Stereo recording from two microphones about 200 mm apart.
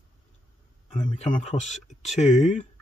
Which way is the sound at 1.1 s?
35° left (ahead or behind).